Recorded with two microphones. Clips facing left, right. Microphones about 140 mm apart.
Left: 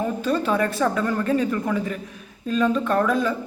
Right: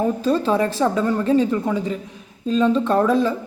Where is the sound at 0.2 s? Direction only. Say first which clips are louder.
Right 3 dB; 30° right (ahead or behind).